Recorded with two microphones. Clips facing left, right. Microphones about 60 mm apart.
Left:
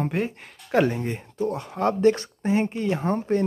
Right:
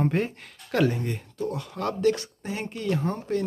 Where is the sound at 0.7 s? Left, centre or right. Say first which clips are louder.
Left 3 dB; centre.